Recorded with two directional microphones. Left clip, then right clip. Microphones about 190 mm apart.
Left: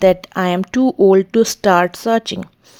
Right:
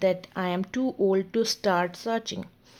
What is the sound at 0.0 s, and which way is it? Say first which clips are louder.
A woman's voice: left 12 dB; 35° left (ahead or behind).